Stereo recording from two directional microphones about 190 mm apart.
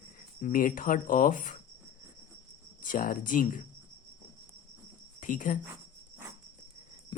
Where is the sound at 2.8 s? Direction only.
45° left (ahead or behind).